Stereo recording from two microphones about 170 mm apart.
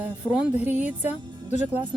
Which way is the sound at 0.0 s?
10° right (ahead or behind).